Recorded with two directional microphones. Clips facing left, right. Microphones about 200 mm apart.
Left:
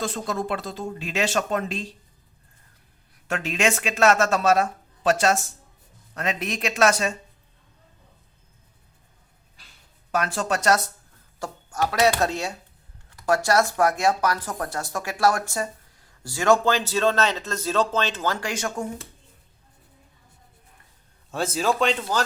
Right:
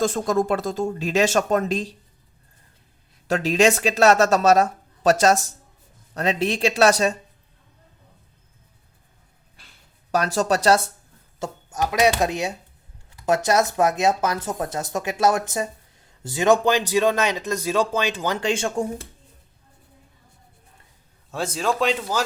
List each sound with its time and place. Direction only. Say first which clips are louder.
0.0 s speech: right 7 dB; 45° right (ahead or behind)
3.2 s speech: right 6 dB; 35° right (ahead or behind)
10.1 s speech: right 4 dB; 40° right (ahead or behind)
11.3 s speech: right 1 dB; 20° right (ahead or behind)
21.2 s speech: even; centre (ahead or behind)